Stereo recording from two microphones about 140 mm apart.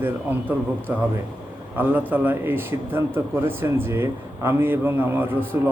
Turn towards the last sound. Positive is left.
turn(degrees=-15)  # may be behind; listen again after turning